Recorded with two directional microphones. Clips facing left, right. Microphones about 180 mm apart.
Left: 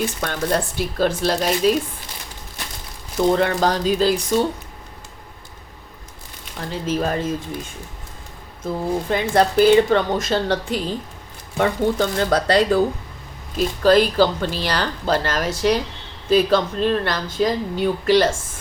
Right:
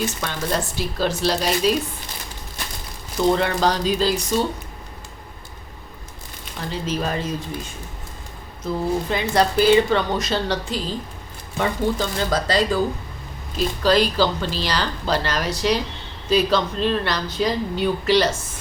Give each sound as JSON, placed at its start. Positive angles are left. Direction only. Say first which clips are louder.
{"t": 0.0, "sound": "speech", "louder": "left 2 dB", "side_deg": 55}
{"t": 3.2, "sound": "speech", "louder": "left 2 dB", "side_deg": 45}
{"t": 6.6, "sound": "speech", "louder": "left 3 dB", "side_deg": 50}
{"t": 8.6, "sound": "speech", "louder": "even", "side_deg": 50}
{"t": 13.6, "sound": "speech", "louder": "left 3 dB", "side_deg": 50}